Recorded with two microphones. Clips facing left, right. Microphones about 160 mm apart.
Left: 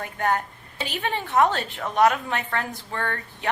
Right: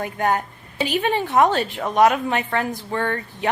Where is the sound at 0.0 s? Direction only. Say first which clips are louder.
Right 3 dB; 15° right (ahead or behind).